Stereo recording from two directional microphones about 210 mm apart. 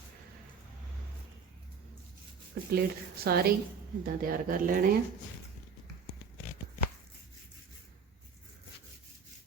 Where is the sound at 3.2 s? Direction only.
45° right (ahead or behind).